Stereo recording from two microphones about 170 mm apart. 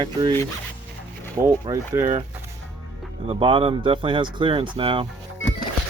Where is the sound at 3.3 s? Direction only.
30° right (ahead or behind).